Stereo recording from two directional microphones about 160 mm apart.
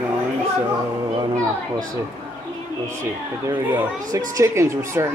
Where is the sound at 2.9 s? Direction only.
15° right (ahead or behind).